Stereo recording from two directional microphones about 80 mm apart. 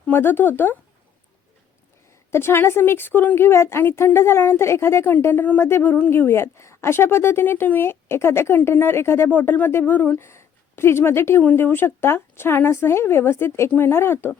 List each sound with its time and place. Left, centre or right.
0.1 s speech: left
2.3 s a woman's voice: left